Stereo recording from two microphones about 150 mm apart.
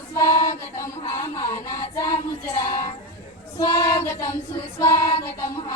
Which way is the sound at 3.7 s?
20° left (ahead or behind).